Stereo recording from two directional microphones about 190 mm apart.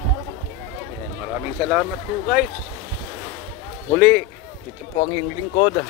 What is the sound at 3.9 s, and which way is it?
Speech, 10° left (ahead or behind).